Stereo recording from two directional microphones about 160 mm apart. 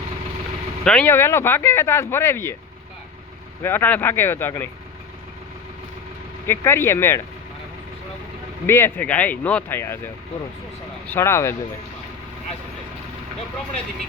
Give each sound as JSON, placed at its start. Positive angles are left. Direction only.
{"t": 0.9, "sound": "speech", "side_deg": 10}
{"t": 3.6, "sound": "speech", "side_deg": 15}
{"t": 6.5, "sound": "speech", "side_deg": 15}
{"t": 8.6, "sound": "speech", "side_deg": 15}
{"t": 11.0, "sound": "speech", "side_deg": 15}